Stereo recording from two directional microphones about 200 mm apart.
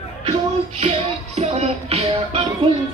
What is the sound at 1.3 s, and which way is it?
Music, 35° right (ahead or behind).